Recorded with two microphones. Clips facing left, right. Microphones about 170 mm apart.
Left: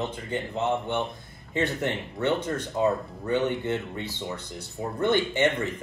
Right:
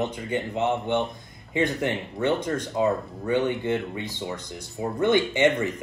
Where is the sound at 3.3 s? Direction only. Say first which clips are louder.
Right 2 dB; 15° right (ahead or behind).